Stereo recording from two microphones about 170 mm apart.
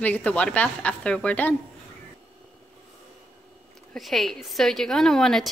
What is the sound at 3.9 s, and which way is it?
A woman's voice, centre (ahead or behind).